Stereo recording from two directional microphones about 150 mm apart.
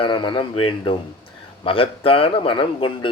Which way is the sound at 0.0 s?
35° left (ahead or behind).